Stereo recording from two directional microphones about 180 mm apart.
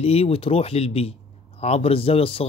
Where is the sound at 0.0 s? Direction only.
35° left (ahead or behind).